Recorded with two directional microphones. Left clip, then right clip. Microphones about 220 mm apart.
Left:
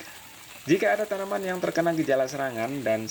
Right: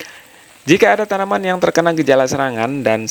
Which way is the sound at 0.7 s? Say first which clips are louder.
Right 11 dB; 50° right (ahead or behind).